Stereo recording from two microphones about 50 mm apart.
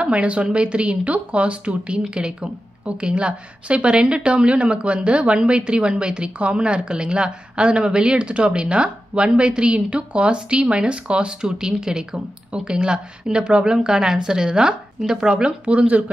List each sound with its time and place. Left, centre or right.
0.0 s speech: right